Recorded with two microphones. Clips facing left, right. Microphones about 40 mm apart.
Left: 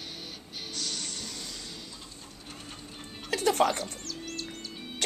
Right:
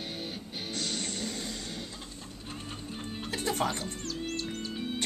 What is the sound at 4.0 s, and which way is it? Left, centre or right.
Music, right.